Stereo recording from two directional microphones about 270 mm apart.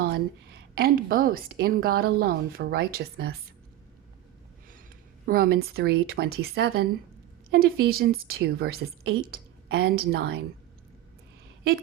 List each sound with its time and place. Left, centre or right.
0.0 s a woman's voice: right
5.2 s a woman's voice: right